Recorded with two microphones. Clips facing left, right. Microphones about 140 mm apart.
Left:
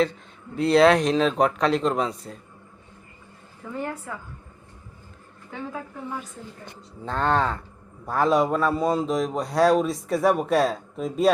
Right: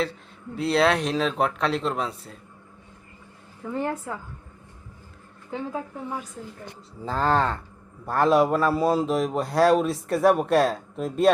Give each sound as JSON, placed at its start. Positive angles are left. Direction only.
{"t": 0.5, "sound": "a man's voice", "side_deg": 0}
{"t": 5.5, "sound": "a woman's voice", "side_deg": -25}
{"t": 7.0, "sound": "a man's voice", "side_deg": 0}